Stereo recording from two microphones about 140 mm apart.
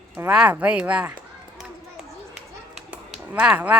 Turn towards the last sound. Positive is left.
turn(degrees=-10)  # may be behind; listen again after turning